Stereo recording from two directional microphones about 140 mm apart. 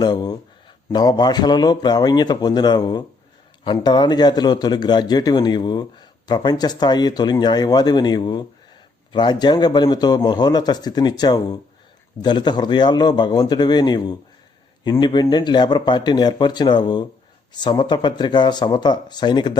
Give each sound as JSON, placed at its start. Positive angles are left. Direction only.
{"t": 0.0, "sound": "a man's voice", "side_deg": 30}